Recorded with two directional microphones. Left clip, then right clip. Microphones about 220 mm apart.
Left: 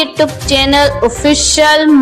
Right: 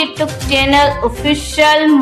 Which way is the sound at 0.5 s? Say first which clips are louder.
Even; 30° left (ahead or behind).